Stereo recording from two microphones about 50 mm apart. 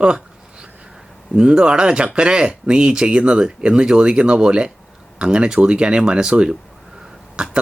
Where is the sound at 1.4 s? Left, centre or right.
Centre.